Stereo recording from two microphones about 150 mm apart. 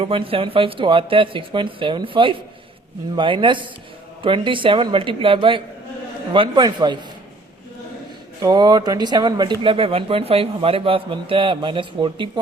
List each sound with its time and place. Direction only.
0.0 s speech: 35° right (ahead or behind)
8.4 s speech: 25° right (ahead or behind)